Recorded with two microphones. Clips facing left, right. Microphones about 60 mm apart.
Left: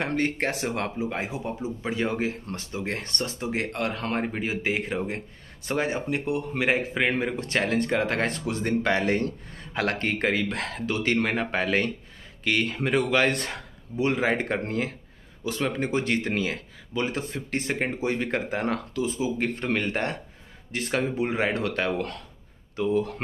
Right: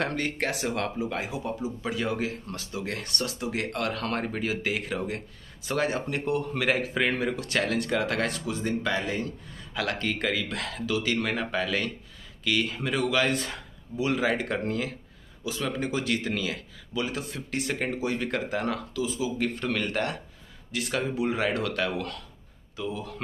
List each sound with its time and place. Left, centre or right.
0.0 s speech: left
8.5 s speech: left
9.8 s speech: left
14.1 s speech: left
18.9 s speech: left
22.8 s speech: left